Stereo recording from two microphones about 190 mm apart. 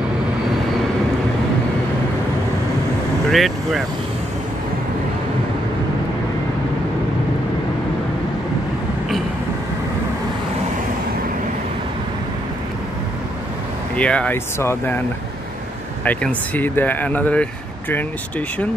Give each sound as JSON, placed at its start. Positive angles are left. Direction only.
{"t": 3.3, "sound": "speech", "side_deg": 0}
{"t": 13.9, "sound": "speech", "side_deg": 5}
{"t": 16.0, "sound": "speech", "side_deg": 10}